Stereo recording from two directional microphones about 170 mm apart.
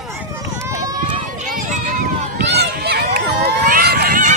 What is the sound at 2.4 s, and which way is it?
Run, 80° right.